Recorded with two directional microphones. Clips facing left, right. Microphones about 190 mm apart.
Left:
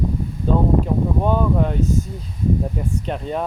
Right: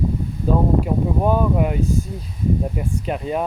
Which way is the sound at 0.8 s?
10° right (ahead or behind).